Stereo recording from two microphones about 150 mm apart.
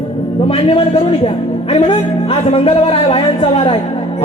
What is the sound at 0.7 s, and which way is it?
Music, 40° left (ahead or behind).